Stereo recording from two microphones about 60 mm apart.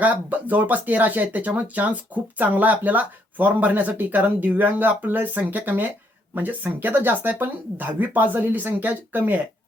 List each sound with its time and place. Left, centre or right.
0.0 s speech: right